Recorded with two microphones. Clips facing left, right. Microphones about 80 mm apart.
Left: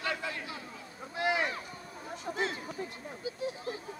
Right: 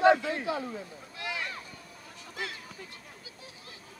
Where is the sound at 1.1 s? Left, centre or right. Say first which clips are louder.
Left 7 dB; left.